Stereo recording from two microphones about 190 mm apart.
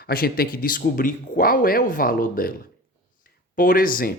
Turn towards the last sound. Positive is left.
turn(degrees=50)  # may be behind; listen again after turning